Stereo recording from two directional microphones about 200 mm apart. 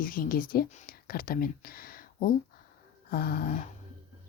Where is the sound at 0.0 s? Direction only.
45° left (ahead or behind).